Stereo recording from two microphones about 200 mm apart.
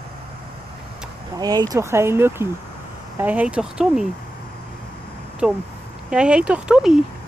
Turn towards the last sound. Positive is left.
turn(degrees=-5)  # may be behind; listen again after turning